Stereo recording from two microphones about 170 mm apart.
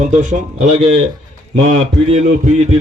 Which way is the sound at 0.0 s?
45° right (ahead or behind).